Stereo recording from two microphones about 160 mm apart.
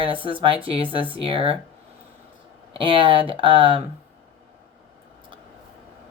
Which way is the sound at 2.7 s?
30° right (ahead or behind).